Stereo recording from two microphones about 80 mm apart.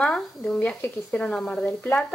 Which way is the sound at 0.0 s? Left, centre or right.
Centre.